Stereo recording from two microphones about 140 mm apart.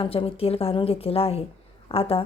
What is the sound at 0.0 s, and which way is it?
Speech, 40° left (ahead or behind).